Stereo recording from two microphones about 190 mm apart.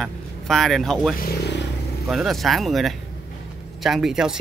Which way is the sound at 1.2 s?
60° left (ahead or behind).